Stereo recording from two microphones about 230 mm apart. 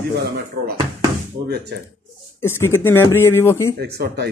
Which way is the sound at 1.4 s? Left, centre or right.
Right.